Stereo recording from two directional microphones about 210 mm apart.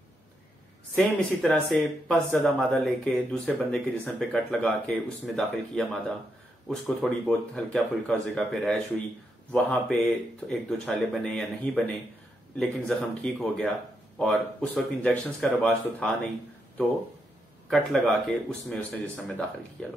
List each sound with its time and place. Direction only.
0.9 s speech: 5° left (ahead or behind)
17.6 s speech: centre (ahead or behind)